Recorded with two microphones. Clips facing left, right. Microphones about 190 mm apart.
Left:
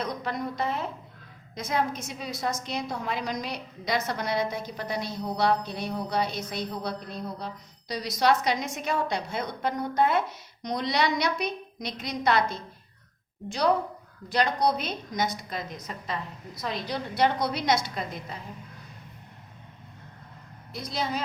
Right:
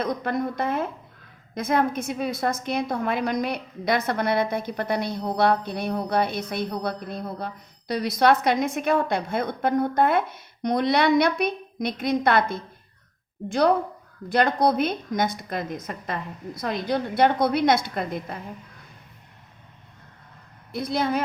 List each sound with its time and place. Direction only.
0.0 s a woman's voice: 50° right (ahead or behind)
14.3 s a woman's voice: 55° right (ahead or behind)
20.7 s a woman's voice: 55° right (ahead or behind)